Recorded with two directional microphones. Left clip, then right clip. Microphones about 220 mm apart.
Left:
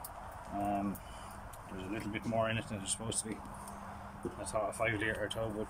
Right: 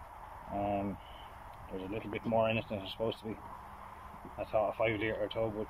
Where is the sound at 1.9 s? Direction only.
15° right (ahead or behind).